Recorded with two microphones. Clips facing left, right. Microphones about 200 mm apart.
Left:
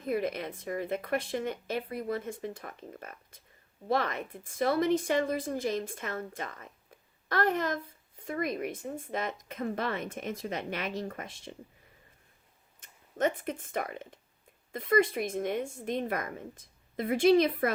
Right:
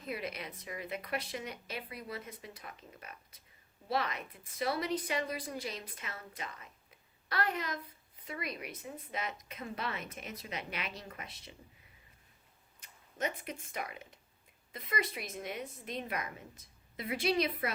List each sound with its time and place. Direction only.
0.0 s speech: 50° left (ahead or behind)
12.8 s speech: 50° left (ahead or behind)